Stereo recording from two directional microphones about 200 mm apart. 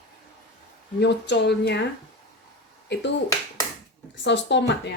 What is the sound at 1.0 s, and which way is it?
Speech, 60° left (ahead or behind).